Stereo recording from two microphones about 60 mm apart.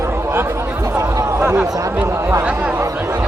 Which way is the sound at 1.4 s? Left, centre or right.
Right.